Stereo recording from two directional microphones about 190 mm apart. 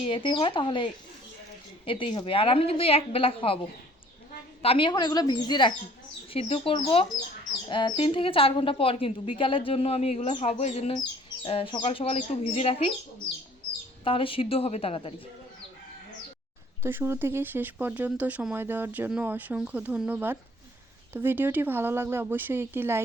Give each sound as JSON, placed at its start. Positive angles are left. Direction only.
{"t": 0.0, "sound": "a woman's voice", "side_deg": 25}
{"t": 4.6, "sound": "a woman's voice", "side_deg": 30}
{"t": 14.0, "sound": "a woman's voice", "side_deg": 30}
{"t": 16.8, "sound": "speech", "side_deg": -10}